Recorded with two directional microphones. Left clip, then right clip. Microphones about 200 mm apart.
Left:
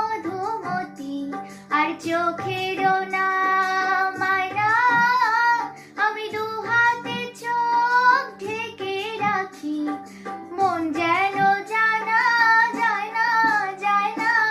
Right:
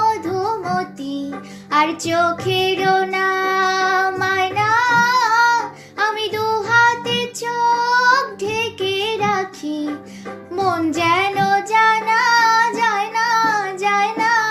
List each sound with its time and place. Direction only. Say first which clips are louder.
1.7 s child singing: right 5 dB; 40° right (ahead or behind)
10.5 s child singing: right 3 dB; 40° right (ahead or behind)